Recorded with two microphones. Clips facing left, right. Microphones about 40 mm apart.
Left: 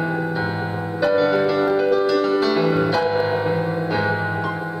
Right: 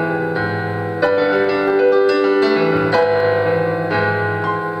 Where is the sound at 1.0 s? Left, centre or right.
Centre.